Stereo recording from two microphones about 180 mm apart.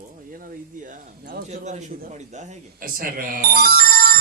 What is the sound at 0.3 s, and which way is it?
A man's voice, 45° right (ahead or behind).